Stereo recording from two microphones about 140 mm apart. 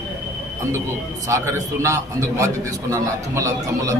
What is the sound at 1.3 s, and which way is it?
A man's voice, 20° right (ahead or behind).